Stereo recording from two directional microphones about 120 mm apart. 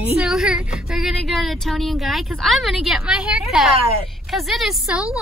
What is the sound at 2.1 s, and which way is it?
A woman's voice, centre (ahead or behind).